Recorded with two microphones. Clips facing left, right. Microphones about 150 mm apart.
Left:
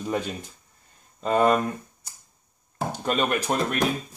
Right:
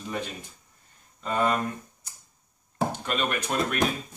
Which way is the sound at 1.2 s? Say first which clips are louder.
Left 6 dB; 55° left (ahead or behind).